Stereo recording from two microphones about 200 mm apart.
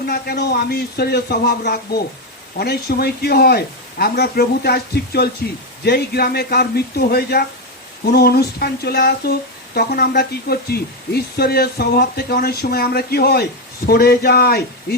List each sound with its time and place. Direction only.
0.0 s speech: 50° left (ahead or behind)